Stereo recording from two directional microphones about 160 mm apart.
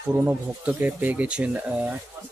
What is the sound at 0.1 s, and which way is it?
Speech, 10° right (ahead or behind).